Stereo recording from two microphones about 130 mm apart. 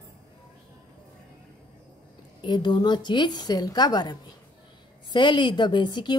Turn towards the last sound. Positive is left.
turn(degrees=35)  # may be behind; listen again after turning